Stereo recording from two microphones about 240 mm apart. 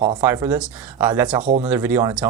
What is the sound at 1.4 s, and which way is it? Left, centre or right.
Speech, right.